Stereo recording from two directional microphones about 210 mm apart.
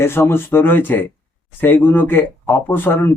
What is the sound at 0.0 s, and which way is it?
Speech, 10° left (ahead or behind).